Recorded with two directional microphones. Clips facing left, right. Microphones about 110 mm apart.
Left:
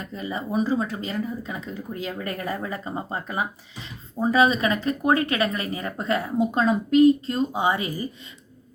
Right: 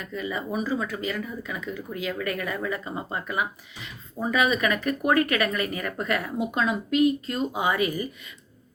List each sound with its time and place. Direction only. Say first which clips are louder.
0.0 s speech: even; 35° left (ahead or behind)